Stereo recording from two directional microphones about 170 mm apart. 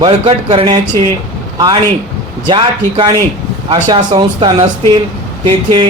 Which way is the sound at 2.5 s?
25° right (ahead or behind).